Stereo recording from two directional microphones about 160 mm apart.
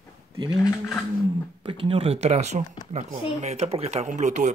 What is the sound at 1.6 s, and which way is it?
Speech, 35° right (ahead or behind).